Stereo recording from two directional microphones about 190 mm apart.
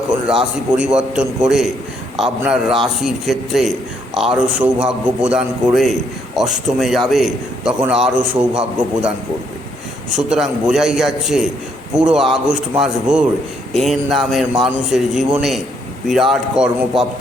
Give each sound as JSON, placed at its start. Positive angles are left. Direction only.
{"t": 0.3, "sound": "a man's voice", "side_deg": -5}
{"t": 10.2, "sound": "a man's voice", "side_deg": -5}